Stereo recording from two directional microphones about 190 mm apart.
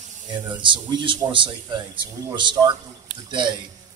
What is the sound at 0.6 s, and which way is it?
A man's voice, 25° right (ahead or behind).